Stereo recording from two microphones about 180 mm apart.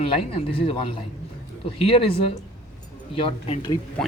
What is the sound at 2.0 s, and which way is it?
A man's voice, 30° left (ahead or behind).